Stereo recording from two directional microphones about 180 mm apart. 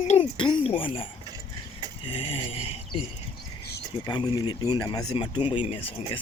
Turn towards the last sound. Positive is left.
turn(degrees=30)  # may be behind; listen again after turning